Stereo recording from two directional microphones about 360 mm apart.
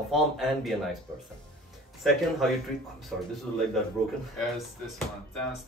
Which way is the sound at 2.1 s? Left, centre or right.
Centre.